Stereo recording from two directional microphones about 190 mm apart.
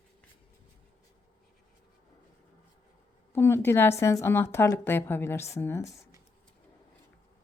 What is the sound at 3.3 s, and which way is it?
A woman's voice, 10° left (ahead or behind).